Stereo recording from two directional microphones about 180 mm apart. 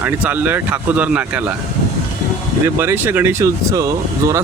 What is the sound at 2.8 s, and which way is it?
Speech, 10° right (ahead or behind).